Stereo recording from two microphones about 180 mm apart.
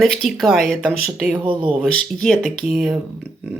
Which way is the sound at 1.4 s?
30° right (ahead or behind).